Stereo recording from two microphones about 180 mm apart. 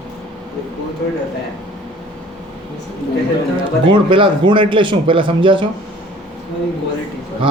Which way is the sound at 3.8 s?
30° right (ahead or behind).